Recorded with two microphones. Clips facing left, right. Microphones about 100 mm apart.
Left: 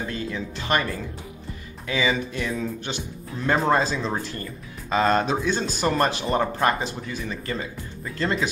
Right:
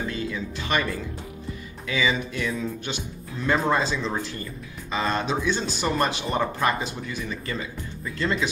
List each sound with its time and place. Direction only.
0.1 s speech: 35° left (ahead or behind)
1.9 s speech: 35° left (ahead or behind)